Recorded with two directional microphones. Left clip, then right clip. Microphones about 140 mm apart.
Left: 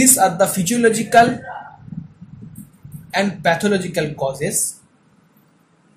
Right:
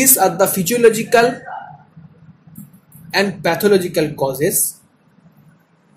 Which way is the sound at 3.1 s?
45° right (ahead or behind).